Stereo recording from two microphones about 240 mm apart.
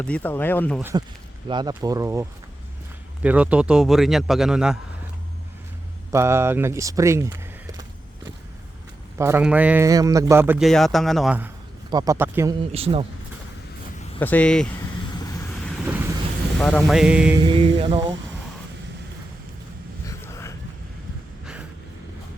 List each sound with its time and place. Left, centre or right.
0.0 s speech: centre
0.8 s speech: centre
3.2 s speech: centre
6.1 s speech: centre
9.1 s a man's voice: centre
12.7 s speech: right
14.2 s speech: centre
15.2 s vehicle: centre
16.6 s speech: centre
17.4 s speech: right
20.1 s vehicle: centre